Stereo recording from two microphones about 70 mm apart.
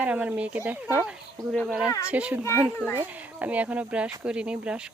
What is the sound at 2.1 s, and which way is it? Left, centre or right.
Speech, centre.